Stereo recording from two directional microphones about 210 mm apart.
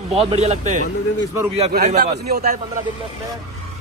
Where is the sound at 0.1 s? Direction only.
30° right (ahead or behind).